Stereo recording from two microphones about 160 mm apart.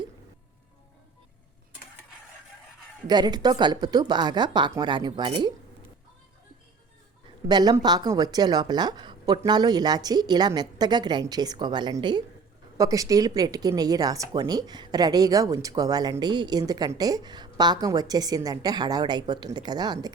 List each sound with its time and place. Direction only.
3.1 s speech: 25° right (ahead or behind)
7.4 s speech: 25° right (ahead or behind)